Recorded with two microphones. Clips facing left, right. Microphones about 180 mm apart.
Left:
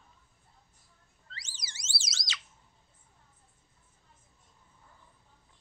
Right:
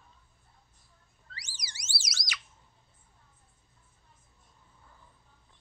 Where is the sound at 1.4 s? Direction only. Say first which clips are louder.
Right 2 dB; 25° left (ahead or behind).